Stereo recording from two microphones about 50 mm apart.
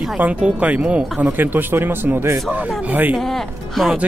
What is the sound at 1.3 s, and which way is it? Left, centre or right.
Speech, right.